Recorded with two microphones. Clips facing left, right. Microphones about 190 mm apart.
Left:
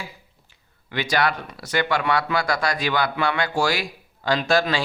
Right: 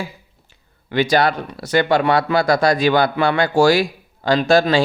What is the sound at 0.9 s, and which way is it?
A man's voice, 30° right (ahead or behind).